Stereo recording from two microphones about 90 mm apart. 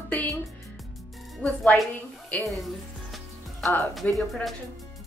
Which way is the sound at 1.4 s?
15° left (ahead or behind).